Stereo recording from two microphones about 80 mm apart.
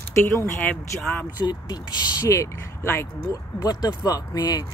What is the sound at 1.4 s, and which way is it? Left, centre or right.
Speech, left.